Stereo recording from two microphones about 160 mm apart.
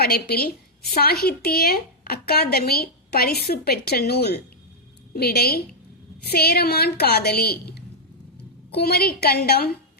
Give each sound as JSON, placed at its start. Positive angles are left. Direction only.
{"t": 0.0, "sound": "a woman's voice", "side_deg": 75}